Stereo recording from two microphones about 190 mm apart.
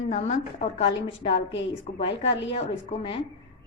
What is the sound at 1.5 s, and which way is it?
Speech, 70° left (ahead or behind).